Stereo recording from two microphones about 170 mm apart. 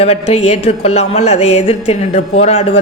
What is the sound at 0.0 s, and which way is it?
Music, 35° left (ahead or behind).